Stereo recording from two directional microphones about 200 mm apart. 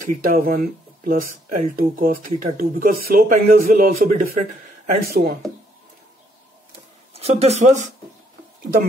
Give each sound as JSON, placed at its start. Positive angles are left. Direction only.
{"t": 0.0, "sound": "speech", "side_deg": -45}
{"t": 7.2, "sound": "speech", "side_deg": -30}